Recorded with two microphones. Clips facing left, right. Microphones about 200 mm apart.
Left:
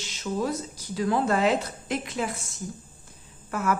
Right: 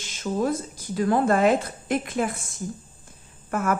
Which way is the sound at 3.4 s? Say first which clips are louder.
Right 2 dB; 50° right (ahead or behind).